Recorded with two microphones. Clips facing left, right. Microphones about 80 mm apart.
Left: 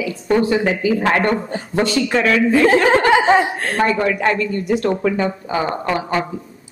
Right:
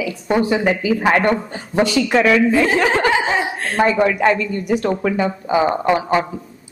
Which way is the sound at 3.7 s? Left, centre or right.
Centre.